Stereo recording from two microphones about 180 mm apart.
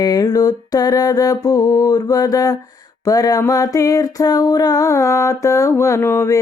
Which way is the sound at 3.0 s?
20° left (ahead or behind).